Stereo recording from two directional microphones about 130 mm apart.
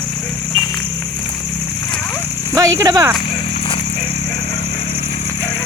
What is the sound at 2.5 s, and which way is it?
Speech, 25° right (ahead or behind).